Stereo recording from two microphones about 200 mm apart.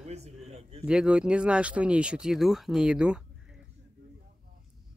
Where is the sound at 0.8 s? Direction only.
5° right (ahead or behind).